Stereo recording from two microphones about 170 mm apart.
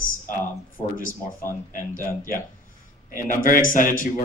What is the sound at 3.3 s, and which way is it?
Speech, 55° left (ahead or behind).